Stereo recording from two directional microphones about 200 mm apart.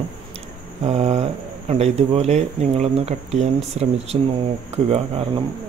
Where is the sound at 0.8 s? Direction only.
30° right (ahead or behind).